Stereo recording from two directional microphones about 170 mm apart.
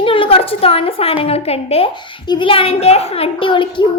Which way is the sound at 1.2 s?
35° left (ahead or behind).